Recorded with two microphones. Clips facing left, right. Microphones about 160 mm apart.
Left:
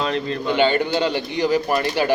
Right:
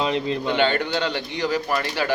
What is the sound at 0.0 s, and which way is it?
Speech, 15° right (ahead or behind).